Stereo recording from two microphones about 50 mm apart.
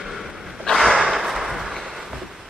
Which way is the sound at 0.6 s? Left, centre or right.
Centre.